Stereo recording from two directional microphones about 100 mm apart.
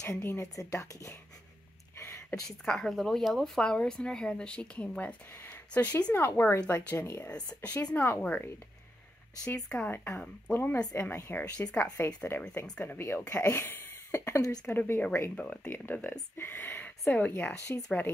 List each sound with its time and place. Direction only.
0.2 s speech: 25° left (ahead or behind)
2.0 s a sound: 25° left (ahead or behind)
2.6 s speech: 5° left (ahead or behind)
7.0 s speech: 25° left (ahead or behind)
7.6 s speech: 15° left (ahead or behind)
9.7 s speech: 20° left (ahead or behind)